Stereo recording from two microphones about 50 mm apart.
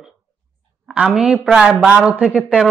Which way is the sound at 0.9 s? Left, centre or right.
Centre.